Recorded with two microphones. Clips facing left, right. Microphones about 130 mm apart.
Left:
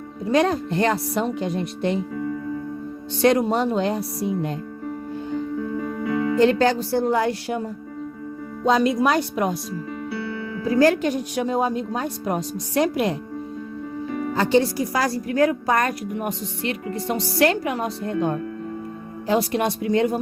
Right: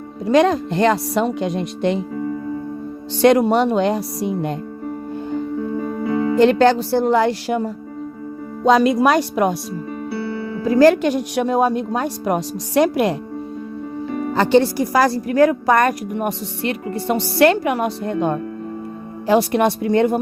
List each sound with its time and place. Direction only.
0.3 s speech: 90° right
2.1 s music: 35° right (ahead or behind)
3.2 s speech: 75° right (ahead or behind)
5.5 s music: 30° right (ahead or behind)
6.4 s a woman's voice: 70° right (ahead or behind)
10.1 s music: 30° right (ahead or behind)
10.7 s speech: 90° right; by 13.1 s 70° right (ahead or behind)
14.1 s music: 35° right (ahead or behind)
14.3 s speech: 70° right (ahead or behind)